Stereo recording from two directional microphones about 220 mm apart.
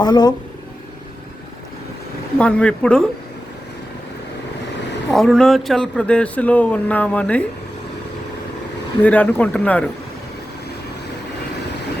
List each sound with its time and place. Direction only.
0.0 s speech: 20° left (ahead or behind)
2.4 s speech: 5° left (ahead or behind)
5.1 s speech: centre (ahead or behind)
9.0 s speech: 5° left (ahead or behind)